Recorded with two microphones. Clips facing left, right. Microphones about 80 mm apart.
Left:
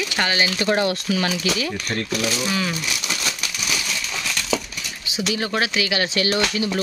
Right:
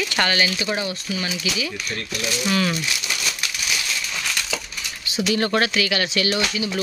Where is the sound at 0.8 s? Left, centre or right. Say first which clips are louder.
Left 5 dB; left.